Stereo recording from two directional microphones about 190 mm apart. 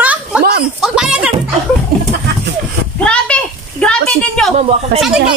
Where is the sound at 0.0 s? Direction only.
5° right (ahead or behind).